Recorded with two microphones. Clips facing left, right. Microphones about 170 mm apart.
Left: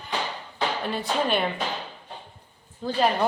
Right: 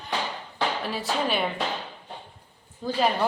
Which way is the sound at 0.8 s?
5° right (ahead or behind).